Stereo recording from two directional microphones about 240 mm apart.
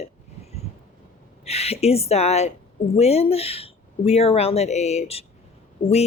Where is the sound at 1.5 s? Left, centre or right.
Left.